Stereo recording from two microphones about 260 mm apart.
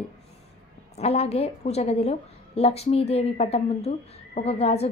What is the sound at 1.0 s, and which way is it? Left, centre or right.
Speech, left.